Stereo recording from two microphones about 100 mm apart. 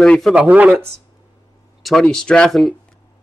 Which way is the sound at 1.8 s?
5° left (ahead or behind).